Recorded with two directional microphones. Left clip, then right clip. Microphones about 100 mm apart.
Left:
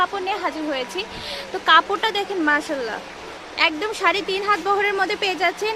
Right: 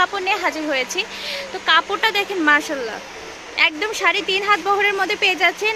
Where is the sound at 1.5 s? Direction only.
50° left (ahead or behind).